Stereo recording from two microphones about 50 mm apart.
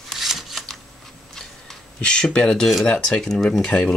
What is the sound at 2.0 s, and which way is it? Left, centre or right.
Speech, centre.